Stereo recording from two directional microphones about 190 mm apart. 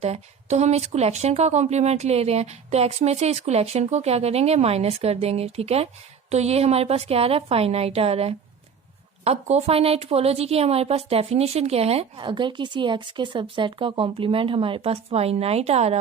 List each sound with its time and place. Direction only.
0.0 s a woman's voice: 35° right (ahead or behind)